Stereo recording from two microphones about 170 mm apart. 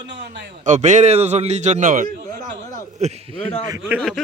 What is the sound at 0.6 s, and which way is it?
A man's voice, 45° right (ahead or behind).